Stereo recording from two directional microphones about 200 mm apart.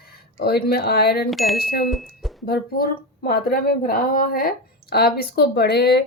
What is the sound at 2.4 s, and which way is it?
Speech, 50° left (ahead or behind).